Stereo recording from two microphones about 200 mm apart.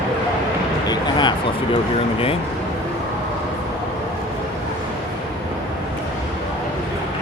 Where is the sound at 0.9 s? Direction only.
25° left (ahead or behind).